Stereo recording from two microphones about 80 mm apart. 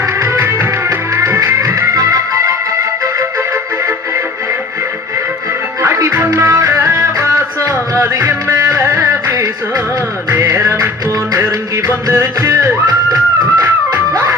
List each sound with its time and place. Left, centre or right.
0.0 s music: right
5.8 s music: right